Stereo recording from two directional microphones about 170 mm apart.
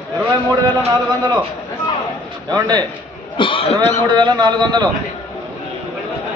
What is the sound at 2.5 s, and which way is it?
Speech, 25° right (ahead or behind).